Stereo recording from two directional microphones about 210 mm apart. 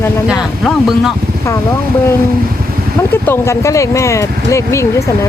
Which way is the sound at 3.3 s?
15° left (ahead or behind).